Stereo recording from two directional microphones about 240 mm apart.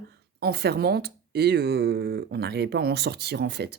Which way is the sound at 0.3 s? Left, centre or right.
Right.